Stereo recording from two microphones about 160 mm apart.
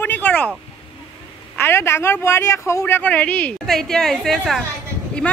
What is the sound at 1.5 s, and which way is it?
A man's voice, 15° left (ahead or behind).